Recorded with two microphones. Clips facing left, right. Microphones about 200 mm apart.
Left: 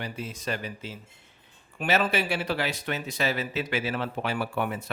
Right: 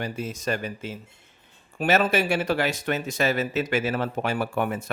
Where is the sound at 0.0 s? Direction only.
45° right (ahead or behind).